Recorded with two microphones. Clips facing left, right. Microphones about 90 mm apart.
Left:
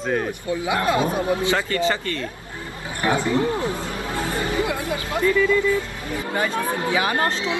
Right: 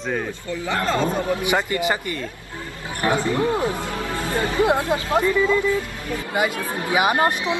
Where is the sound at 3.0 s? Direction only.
20° left (ahead or behind).